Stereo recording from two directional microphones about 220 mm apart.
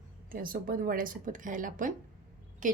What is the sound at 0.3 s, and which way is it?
Speech, 40° right (ahead or behind).